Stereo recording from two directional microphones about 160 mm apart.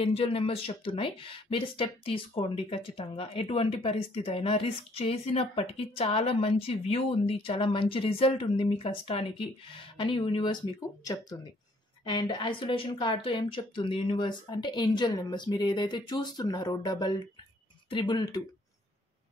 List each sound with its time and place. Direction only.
0.0 s a woman's voice: 35° left (ahead or behind)
12.0 s a woman's voice: 30° left (ahead or behind)